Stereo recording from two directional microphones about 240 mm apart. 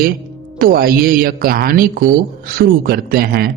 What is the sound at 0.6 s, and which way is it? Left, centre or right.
A man's voice, right.